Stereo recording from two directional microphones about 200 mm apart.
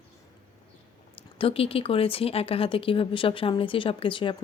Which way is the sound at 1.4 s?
30° left (ahead or behind).